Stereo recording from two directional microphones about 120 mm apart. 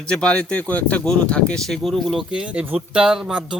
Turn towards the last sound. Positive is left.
turn(degrees=-5)  # may be behind; listen again after turning